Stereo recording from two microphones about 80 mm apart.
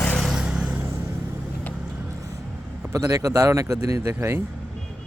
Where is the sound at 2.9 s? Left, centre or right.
Right.